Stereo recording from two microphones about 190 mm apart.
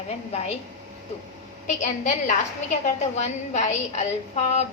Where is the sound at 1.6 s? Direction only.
40° left (ahead or behind).